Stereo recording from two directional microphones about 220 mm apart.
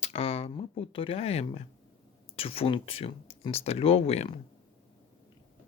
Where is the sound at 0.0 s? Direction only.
25° left (ahead or behind).